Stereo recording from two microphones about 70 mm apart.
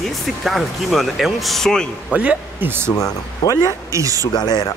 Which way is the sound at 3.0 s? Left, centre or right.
Left.